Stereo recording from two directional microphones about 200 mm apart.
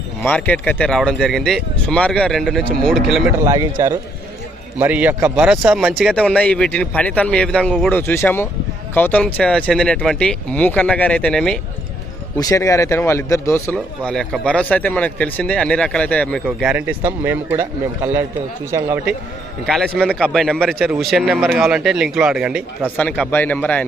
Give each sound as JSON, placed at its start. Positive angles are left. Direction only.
{"t": 0.2, "sound": "speech", "side_deg": 10}
{"t": 3.3, "sound": "speech", "side_deg": -15}
{"t": 4.8, "sound": "speech", "side_deg": -10}
{"t": 12.4, "sound": "speech", "side_deg": 15}
{"t": 19.6, "sound": "speech", "side_deg": 0}
{"t": 23.0, "sound": "speech", "side_deg": 5}